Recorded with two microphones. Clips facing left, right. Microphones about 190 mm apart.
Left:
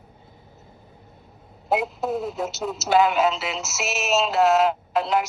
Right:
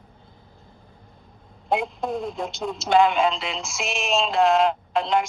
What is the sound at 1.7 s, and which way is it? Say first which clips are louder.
Speech: left 1 dB; 5° left (ahead or behind).